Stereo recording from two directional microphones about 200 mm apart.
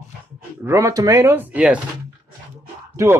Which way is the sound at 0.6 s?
15° right (ahead or behind).